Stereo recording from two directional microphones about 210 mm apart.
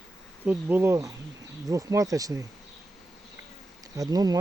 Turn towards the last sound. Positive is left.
turn(degrees=-20)  # may be behind; listen again after turning